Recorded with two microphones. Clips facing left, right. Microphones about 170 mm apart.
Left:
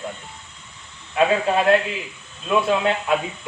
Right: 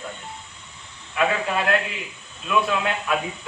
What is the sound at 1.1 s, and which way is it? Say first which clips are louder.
Speech: left 5 dB; 30° left (ahead or behind).